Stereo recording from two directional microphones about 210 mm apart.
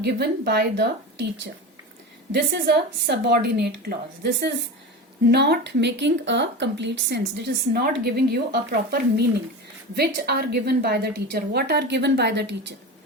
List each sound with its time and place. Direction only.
0.0 s a woman's voice: 50° right (ahead or behind)
2.3 s a woman's voice: 50° right (ahead or behind)